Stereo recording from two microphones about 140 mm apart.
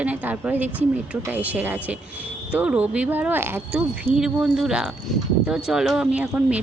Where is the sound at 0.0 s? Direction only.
10° right (ahead or behind).